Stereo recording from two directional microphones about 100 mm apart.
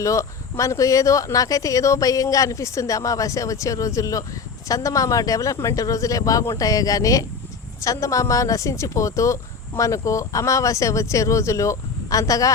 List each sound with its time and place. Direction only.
0.0 s a woman's voice: 30° left (ahead or behind)